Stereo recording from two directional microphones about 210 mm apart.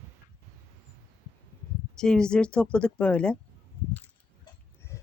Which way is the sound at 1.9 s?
5° left (ahead or behind).